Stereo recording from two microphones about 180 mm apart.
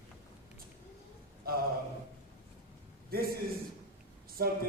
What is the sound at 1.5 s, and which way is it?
Speech, 55° right (ahead or behind).